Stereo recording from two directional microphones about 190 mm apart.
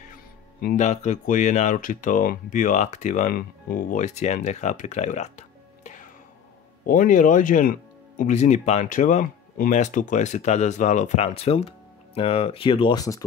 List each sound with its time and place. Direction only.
0.6 s speech: 45° left (ahead or behind)
6.9 s speech: 45° left (ahead or behind); by 13.2 s 20° left (ahead or behind)